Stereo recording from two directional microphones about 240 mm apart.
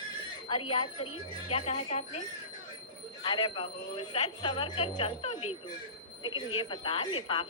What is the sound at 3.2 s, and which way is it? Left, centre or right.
Speech, centre.